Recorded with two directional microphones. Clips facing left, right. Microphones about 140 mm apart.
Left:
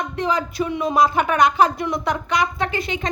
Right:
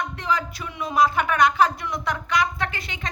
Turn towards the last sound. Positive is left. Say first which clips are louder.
# left 6 dB
turn(degrees=20)  # may be behind; listen again after turning